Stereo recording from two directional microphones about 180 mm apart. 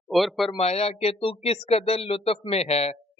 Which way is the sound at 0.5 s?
35° left (ahead or behind).